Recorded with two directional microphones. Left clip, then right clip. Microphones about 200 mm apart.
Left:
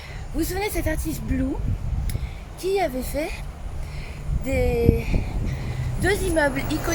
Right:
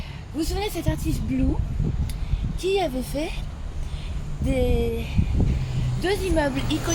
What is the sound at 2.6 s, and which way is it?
Speech, 25° right (ahead or behind).